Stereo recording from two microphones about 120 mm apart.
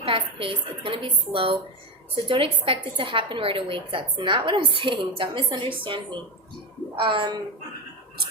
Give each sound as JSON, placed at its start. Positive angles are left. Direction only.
{"t": 0.0, "sound": "a woman's voice", "side_deg": -50}